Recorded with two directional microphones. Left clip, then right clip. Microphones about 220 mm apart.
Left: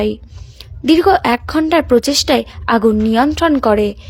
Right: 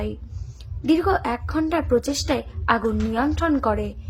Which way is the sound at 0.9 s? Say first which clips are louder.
Left 10 dB; 40° left (ahead or behind).